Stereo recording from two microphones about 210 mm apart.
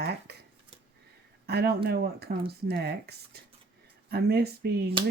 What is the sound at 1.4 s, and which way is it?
Speech, 50° right (ahead or behind).